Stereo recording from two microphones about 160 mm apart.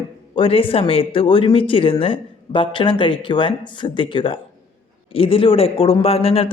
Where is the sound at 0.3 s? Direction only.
35° left (ahead or behind).